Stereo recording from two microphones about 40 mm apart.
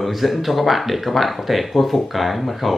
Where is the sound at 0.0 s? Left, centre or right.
Centre.